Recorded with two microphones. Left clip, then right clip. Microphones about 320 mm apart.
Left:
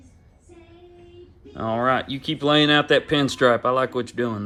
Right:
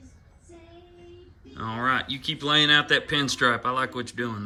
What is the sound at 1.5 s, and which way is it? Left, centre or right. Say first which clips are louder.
Speech: left 4 dB; centre.